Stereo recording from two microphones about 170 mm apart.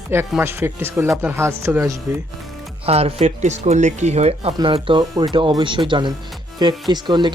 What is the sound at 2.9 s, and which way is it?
Speech, 35° right (ahead or behind).